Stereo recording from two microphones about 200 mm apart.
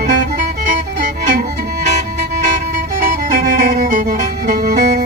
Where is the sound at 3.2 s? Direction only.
40° right (ahead or behind).